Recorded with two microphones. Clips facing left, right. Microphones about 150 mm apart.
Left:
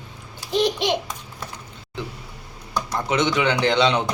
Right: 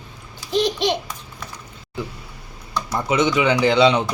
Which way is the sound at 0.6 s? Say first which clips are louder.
Right 1 dB; 20° left (ahead or behind).